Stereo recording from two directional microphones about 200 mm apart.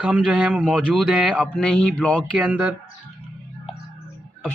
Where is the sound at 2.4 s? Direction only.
5° right (ahead or behind).